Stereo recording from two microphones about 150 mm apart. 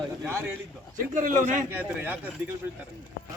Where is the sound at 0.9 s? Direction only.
60° right (ahead or behind).